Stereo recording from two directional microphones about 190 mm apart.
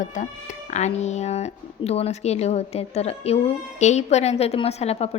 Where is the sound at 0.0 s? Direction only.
40° left (ahead or behind).